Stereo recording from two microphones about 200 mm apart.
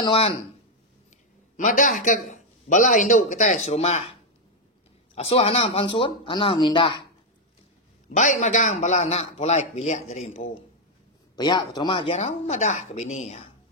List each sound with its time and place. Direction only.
0.0 s speech: 25° left (ahead or behind)
1.6 s speech: 40° left (ahead or behind)
5.1 s speech: 30° left (ahead or behind)
8.2 s speech: 40° left (ahead or behind)
11.3 s speech: 20° left (ahead or behind)